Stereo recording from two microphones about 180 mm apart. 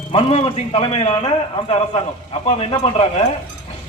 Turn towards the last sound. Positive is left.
turn(degrees=35)  # may be behind; listen again after turning